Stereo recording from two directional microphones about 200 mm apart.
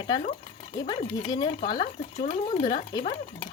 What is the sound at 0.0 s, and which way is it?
Speech, 25° left (ahead or behind).